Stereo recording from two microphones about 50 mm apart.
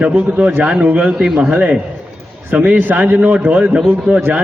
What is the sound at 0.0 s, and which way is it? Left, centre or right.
A man's voice, right.